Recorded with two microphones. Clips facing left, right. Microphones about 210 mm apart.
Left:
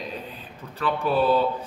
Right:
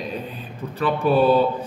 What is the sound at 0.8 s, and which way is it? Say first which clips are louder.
Speech: right 5 dB; 15° right (ahead or behind).